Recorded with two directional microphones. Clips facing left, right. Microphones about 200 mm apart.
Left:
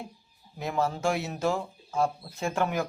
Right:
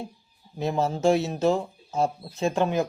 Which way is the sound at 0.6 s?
25° right (ahead or behind).